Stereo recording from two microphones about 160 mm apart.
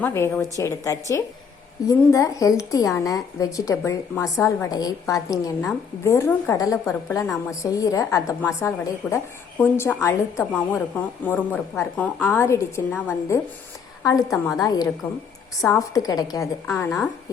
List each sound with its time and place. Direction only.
0.0 s a woman's voice: 15° left (ahead or behind)